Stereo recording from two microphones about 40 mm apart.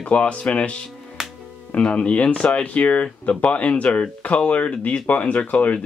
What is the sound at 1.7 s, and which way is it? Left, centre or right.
Speech, left.